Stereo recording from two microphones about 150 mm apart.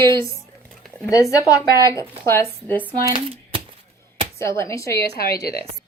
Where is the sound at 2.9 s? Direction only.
35° right (ahead or behind).